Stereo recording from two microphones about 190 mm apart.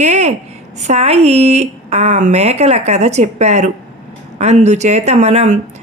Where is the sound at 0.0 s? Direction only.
35° right (ahead or behind).